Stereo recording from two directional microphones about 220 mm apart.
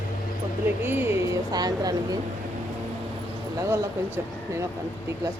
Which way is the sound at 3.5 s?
15° right (ahead or behind).